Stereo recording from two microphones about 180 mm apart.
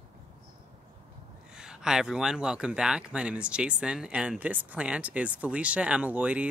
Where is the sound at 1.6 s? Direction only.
5° right (ahead or behind).